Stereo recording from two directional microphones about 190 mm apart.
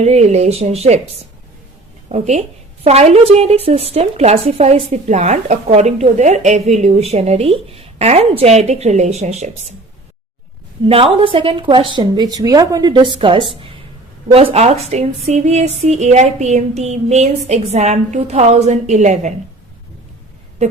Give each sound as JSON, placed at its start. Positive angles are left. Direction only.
{"t": 0.0, "sound": "speech", "side_deg": -35}
{"t": 2.0, "sound": "speech", "side_deg": -35}
{"t": 10.8, "sound": "a woman's voice", "side_deg": -30}